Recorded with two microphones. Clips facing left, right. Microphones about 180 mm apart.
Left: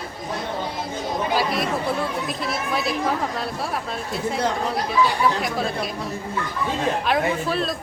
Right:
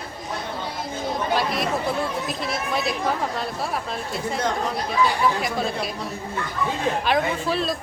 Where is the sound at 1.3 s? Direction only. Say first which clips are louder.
Left 2 dB; centre (ahead or behind).